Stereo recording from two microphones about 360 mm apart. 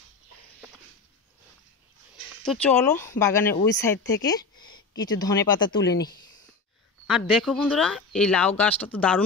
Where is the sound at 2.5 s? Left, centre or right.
Centre.